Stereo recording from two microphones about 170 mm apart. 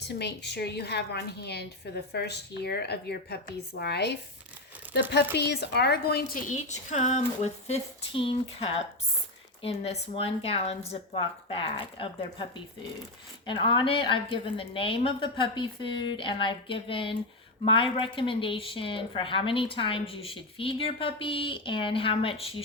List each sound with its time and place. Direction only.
0.0 s a woman's voice: 80° left; by 22.4 s 30° left (ahead or behind)